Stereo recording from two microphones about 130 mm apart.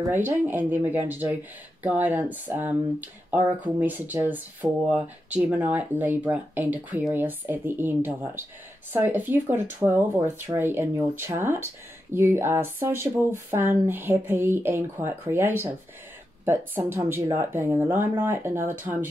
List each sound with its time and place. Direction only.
0.0 s speech: 15° right (ahead or behind)